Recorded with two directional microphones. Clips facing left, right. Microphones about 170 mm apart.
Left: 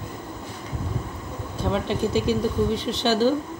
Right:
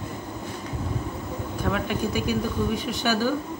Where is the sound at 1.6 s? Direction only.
20° left (ahead or behind).